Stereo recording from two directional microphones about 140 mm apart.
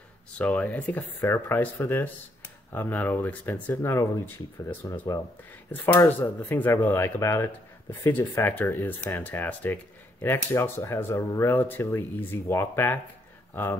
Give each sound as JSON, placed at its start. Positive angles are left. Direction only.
{"t": 0.4, "sound": "speech", "side_deg": 10}